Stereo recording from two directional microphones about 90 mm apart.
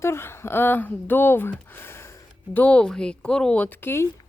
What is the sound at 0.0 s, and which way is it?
Speech, 30° left (ahead or behind).